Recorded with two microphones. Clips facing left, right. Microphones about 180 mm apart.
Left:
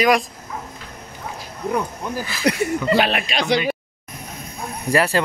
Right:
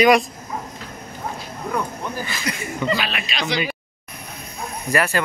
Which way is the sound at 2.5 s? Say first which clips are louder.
Left 6 dB; 65° left (ahead or behind).